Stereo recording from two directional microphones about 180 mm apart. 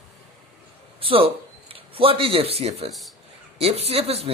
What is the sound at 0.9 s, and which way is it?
A man's voice, 30° right (ahead or behind).